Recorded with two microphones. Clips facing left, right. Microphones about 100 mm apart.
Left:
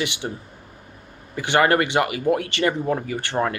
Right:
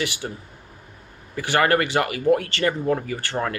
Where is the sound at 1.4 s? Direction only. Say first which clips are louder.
Left 1 dB; 20° left (ahead or behind).